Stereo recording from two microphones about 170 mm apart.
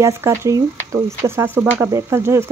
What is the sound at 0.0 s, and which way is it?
Speech, 15° right (ahead or behind).